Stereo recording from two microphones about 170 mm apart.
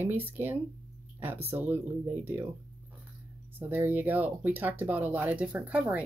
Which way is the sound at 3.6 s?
10° right (ahead or behind).